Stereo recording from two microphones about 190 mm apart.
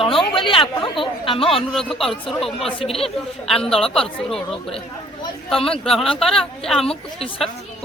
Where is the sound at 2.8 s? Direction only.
30° left (ahead or behind).